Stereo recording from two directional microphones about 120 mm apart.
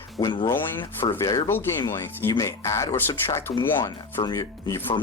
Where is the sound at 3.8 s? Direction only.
35° left (ahead or behind).